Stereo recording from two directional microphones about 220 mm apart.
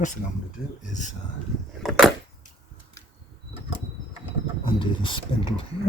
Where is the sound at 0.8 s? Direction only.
35° left (ahead or behind).